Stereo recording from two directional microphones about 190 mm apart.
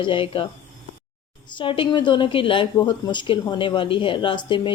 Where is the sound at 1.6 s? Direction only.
25° left (ahead or behind).